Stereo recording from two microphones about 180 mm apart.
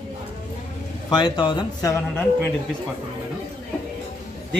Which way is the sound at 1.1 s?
25° left (ahead or behind).